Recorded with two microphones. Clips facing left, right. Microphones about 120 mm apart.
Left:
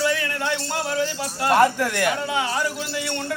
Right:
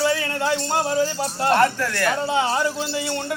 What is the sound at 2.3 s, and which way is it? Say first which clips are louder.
Speech: right 3 dB; 30° right (ahead or behind).